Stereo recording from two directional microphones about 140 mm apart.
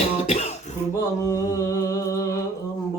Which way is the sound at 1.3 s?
25° left (ahead or behind).